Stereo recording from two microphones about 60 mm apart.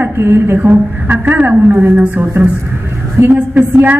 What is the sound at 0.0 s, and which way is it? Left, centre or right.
Speech, right.